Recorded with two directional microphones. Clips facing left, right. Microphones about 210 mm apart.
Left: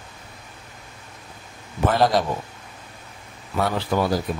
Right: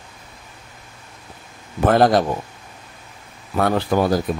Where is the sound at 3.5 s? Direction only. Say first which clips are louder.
Right 4 dB; 50° right (ahead or behind).